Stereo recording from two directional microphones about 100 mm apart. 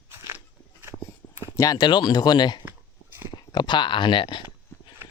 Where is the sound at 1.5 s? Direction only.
40° left (ahead or behind).